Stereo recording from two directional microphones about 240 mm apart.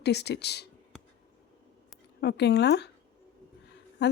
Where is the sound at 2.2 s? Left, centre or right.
Left.